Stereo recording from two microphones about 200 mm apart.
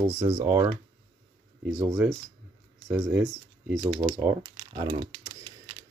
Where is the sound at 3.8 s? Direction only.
20° right (ahead or behind).